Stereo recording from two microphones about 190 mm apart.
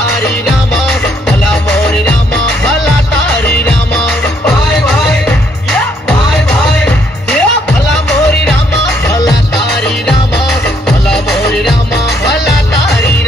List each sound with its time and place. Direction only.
6.8 s music: 5° left (ahead or behind)
9.0 s music: 15° left (ahead or behind)
11.1 s music: centre (ahead or behind)